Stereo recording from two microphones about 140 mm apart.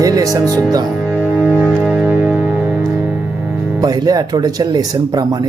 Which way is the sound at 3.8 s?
25° right (ahead or behind).